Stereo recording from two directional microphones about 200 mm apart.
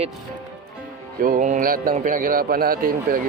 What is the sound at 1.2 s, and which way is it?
A man's voice, 40° right (ahead or behind).